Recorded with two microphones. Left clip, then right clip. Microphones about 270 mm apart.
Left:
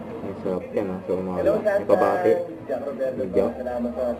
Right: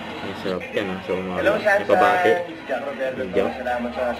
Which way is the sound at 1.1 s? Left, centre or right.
Centre.